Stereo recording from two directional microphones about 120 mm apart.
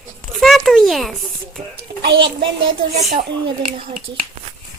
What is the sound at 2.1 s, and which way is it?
Speech, 45° right (ahead or behind).